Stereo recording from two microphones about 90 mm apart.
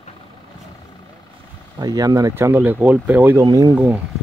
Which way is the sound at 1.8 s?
40° right (ahead or behind).